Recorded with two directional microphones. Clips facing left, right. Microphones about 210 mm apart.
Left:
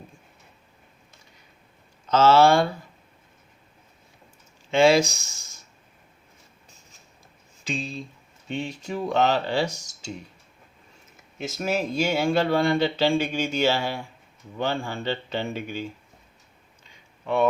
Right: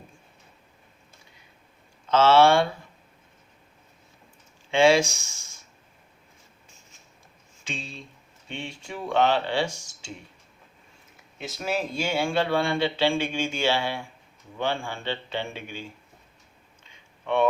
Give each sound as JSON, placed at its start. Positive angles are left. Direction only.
{"t": 2.0, "sound": "speech", "side_deg": 40}
{"t": 4.7, "sound": "speech", "side_deg": 40}
{"t": 7.6, "sound": "speech", "side_deg": 35}
{"t": 11.3, "sound": "speech", "side_deg": 45}